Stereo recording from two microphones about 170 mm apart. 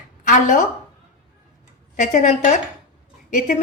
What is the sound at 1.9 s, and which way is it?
Speech, 45° left (ahead or behind).